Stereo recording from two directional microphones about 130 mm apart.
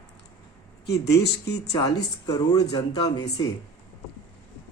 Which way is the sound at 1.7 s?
35° left (ahead or behind).